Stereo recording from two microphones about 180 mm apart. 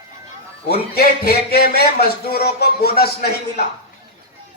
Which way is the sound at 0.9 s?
60° left (ahead or behind).